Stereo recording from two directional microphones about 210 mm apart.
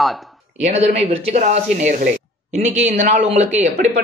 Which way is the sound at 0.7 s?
30° right (ahead or behind).